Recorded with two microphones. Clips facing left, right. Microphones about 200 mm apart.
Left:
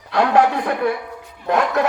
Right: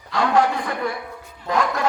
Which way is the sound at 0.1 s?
65° left (ahead or behind).